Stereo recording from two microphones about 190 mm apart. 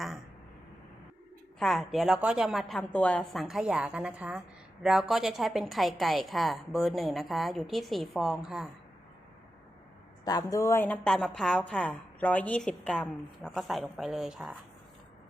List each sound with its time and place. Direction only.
1.5 s a woman's voice: centre (ahead or behind)
10.2 s a woman's voice: 20° left (ahead or behind); by 14.6 s centre (ahead or behind)